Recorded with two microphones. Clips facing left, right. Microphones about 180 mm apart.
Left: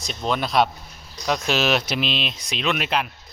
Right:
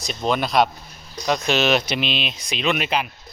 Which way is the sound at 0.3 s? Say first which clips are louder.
Right 2 dB; centre (ahead or behind).